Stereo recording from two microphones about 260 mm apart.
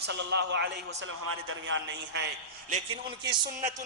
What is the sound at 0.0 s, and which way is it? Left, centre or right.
A man's voice, right.